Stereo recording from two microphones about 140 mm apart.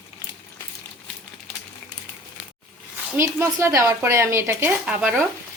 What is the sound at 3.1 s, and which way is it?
Speech, 20° right (ahead or behind).